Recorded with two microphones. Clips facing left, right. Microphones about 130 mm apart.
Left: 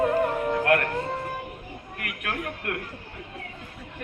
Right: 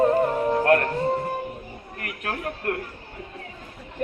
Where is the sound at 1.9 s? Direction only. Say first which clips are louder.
Right 1 dB; 35° right (ahead or behind).